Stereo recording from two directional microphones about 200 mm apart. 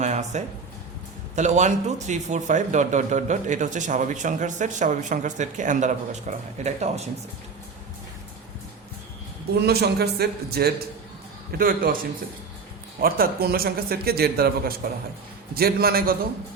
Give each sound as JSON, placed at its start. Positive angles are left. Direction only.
{"t": 0.0, "sound": "speech", "side_deg": -35}
{"t": 9.6, "sound": "speech", "side_deg": -55}
{"t": 13.0, "sound": "speech", "side_deg": -50}